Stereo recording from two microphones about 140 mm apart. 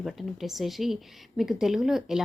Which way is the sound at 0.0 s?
Centre (ahead or behind).